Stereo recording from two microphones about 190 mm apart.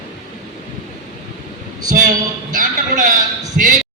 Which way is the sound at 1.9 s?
45° right (ahead or behind).